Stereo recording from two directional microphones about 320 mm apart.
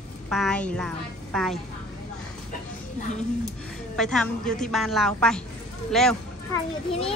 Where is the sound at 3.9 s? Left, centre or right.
Centre.